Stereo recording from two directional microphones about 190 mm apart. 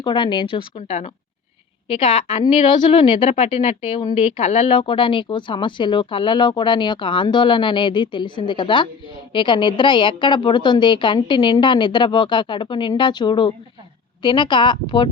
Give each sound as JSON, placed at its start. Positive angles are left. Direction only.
{"t": 0.0, "sound": "a woman's voice", "side_deg": 25}